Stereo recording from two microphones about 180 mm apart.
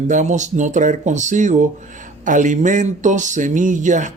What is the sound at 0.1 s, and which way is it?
Speech, 45° right (ahead or behind).